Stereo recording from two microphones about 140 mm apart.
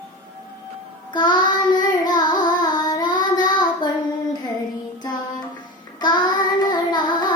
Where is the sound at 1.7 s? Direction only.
30° left (ahead or behind).